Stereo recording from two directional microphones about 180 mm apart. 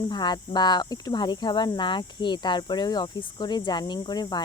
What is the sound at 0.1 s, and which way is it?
Speech, 25° left (ahead or behind).